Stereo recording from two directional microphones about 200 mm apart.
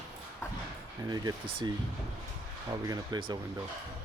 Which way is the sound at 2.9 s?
20° right (ahead or behind).